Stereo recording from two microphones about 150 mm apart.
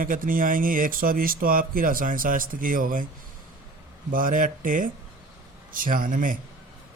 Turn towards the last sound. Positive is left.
turn(degrees=-65)  # may be behind; listen again after turning